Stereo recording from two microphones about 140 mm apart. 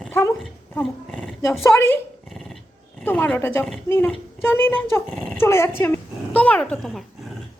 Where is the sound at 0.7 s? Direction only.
5° left (ahead or behind).